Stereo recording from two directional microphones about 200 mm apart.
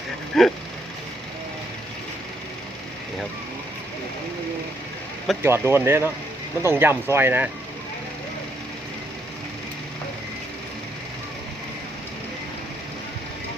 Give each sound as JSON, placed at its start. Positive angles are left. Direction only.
{"t": 0.4, "sound": "vehicle", "side_deg": 0}
{"t": 5.4, "sound": "speech", "side_deg": -10}